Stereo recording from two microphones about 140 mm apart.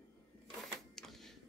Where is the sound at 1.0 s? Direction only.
Centre (ahead or behind).